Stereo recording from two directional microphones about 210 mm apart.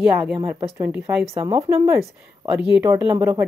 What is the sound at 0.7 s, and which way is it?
A woman's voice, 5° right (ahead or behind).